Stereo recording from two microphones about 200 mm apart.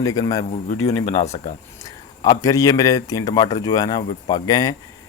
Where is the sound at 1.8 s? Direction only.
20° left (ahead or behind).